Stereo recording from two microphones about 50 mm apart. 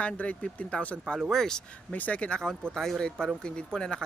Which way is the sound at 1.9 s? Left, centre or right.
Left.